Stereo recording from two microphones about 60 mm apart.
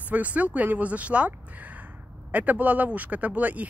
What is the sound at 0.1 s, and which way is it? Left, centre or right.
Speech, right.